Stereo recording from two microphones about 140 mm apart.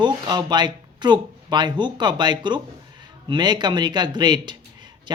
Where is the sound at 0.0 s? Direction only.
30° right (ahead or behind).